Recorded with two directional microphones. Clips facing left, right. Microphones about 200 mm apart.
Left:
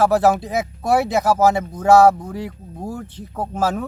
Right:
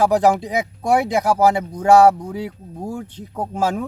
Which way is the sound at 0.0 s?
15° right (ahead or behind).